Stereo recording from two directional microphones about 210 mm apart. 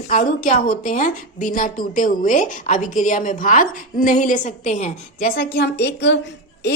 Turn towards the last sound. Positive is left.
turn(degrees=55)  # may be behind; listen again after turning